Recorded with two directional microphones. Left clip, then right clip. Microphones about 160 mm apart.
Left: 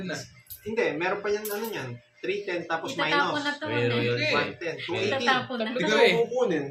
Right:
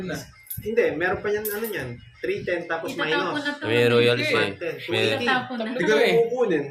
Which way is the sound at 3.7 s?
90° right.